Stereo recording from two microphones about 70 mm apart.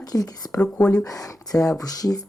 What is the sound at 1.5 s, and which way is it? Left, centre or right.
Speech, left.